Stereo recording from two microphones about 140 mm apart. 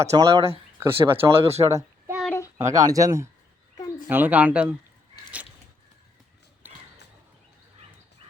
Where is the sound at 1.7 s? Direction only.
20° right (ahead or behind).